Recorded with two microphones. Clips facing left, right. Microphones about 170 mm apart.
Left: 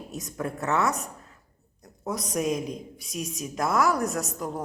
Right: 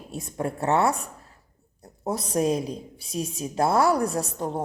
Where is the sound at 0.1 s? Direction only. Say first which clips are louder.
Right 4 dB; 30° right (ahead or behind).